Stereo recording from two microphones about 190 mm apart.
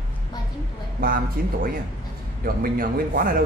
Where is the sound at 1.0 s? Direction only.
50° right (ahead or behind).